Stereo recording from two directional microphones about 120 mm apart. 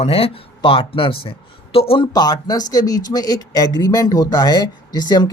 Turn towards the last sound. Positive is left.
turn(degrees=35)  # may be behind; listen again after turning